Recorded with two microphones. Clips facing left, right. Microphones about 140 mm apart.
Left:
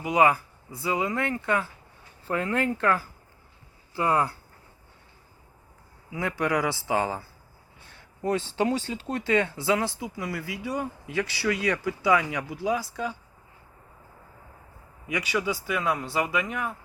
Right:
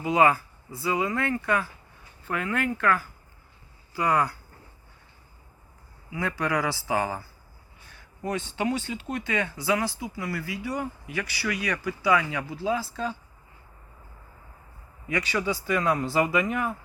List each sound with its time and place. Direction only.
0.0 s speech: 20° left (ahead or behind)
2.2 s speech: 35° left (ahead or behind)
6.1 s speech: 20° left (ahead or behind)
15.0 s speech: 10° left (ahead or behind)